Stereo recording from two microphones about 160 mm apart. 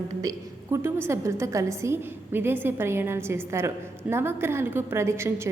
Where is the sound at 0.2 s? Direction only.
20° right (ahead or behind).